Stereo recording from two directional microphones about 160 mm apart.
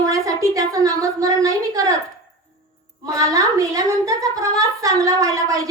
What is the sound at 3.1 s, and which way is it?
A woman's voice, 20° right (ahead or behind).